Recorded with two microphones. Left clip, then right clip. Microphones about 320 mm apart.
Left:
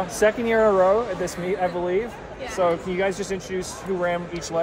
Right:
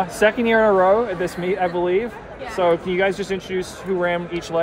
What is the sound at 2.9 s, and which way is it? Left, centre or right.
Speech, centre.